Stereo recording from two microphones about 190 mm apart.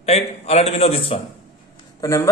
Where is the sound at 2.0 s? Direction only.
15° left (ahead or behind).